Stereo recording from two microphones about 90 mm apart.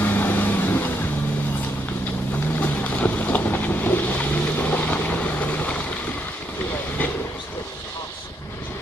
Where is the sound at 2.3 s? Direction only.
20° left (ahead or behind).